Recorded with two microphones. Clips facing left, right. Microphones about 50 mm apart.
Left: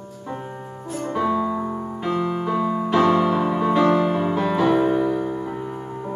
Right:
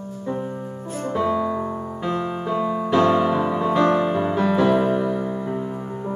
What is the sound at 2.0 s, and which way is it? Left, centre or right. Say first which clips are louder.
Music: left 2 dB; centre.